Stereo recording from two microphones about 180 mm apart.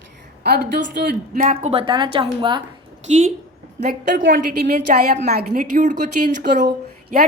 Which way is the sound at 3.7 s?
70° right (ahead or behind).